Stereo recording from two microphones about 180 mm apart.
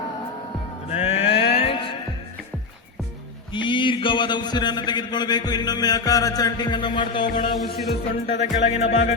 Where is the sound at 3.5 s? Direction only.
25° left (ahead or behind).